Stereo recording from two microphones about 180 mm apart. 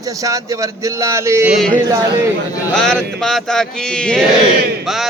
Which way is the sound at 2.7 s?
5° left (ahead or behind).